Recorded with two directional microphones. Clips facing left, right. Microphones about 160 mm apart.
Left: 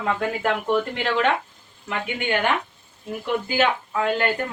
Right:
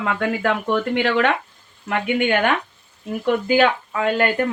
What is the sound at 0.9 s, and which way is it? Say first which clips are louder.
Speech: right 3 dB; 70° right (ahead or behind).